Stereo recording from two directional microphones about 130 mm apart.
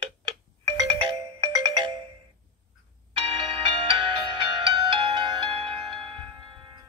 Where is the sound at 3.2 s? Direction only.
45° right (ahead or behind).